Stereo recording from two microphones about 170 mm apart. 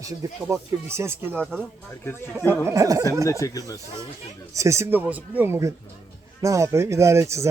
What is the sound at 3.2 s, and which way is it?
Speech, 20° left (ahead or behind).